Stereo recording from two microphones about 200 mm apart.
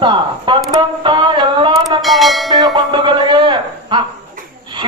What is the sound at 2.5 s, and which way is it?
Music, 20° right (ahead or behind).